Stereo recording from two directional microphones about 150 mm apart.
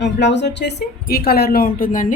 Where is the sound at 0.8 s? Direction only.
90° left; by 2.1 s 65° left (ahead or behind).